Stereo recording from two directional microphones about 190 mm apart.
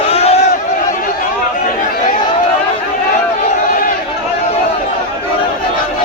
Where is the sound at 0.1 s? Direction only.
35° left (ahead or behind).